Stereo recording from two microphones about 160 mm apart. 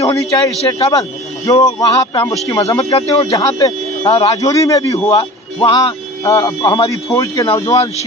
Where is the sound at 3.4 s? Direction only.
25° left (ahead or behind).